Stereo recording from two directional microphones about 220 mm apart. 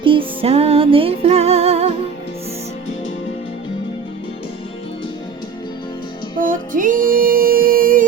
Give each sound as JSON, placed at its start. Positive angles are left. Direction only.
{"t": 0.0, "sound": "music", "side_deg": -25}
{"t": 6.4, "sound": "music", "side_deg": -35}